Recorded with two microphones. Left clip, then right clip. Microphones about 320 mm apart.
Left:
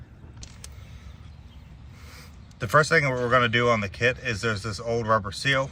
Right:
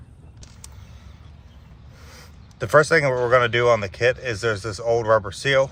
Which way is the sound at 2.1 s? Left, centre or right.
Right.